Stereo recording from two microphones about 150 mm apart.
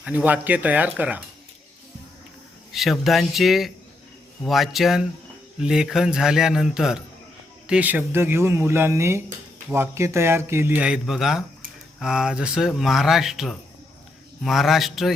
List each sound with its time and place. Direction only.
0.0 s speech: 10° right (ahead or behind)
2.7 s speech: centre (ahead or behind)